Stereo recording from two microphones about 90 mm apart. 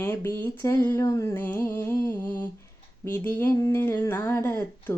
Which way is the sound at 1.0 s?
40° left (ahead or behind).